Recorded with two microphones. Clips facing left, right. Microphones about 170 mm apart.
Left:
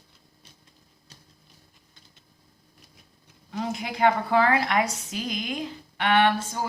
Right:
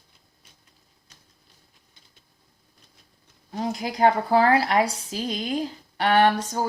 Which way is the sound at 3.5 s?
35° right (ahead or behind).